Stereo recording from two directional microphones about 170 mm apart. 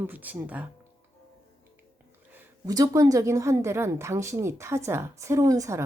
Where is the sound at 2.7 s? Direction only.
20° right (ahead or behind).